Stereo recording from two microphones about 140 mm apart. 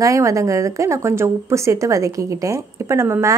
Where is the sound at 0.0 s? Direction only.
25° right (ahead or behind).